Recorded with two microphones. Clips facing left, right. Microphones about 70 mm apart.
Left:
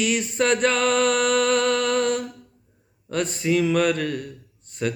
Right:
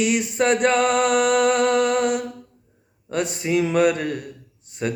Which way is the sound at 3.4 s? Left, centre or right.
Right.